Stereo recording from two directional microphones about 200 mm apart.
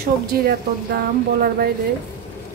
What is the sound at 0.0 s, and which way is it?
Speech, 50° right (ahead or behind).